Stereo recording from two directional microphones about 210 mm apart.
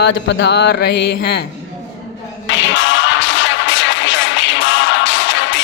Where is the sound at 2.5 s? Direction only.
60° left (ahead or behind).